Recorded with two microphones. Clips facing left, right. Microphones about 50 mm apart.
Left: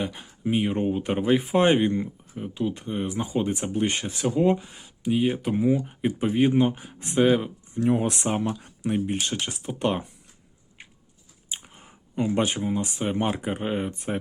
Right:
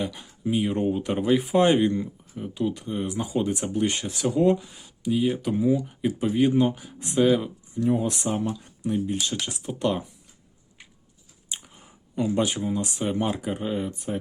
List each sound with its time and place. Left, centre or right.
0.0 s speech: left
4.6 s speech: left
7.8 s speech: left
9.1 s speech: left
11.6 s a sound: left
12.6 s speech: left